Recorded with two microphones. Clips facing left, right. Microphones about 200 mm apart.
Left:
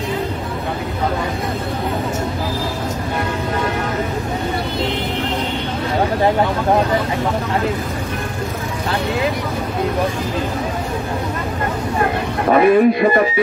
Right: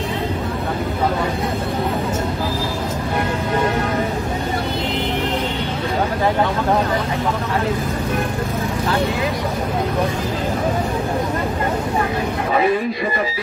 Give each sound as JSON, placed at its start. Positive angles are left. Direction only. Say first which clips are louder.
{"t": 12.4, "sound": "music", "louder": "left 8 dB", "side_deg": 60}